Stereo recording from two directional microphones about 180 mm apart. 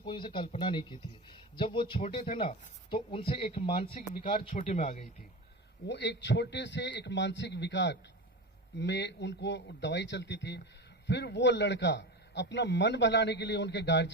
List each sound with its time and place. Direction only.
0.0 s speech: 25° left (ahead or behind)
3.9 s speech: 50° left (ahead or behind)
4.6 s speech: 40° left (ahead or behind)
5.9 s a man's voice: 70° left (ahead or behind)